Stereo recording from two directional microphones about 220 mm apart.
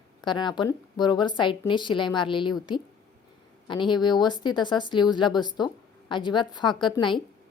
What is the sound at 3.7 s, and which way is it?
A woman's voice, 20° left (ahead or behind).